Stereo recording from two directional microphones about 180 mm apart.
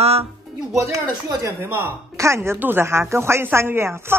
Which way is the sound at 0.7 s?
15° right (ahead or behind).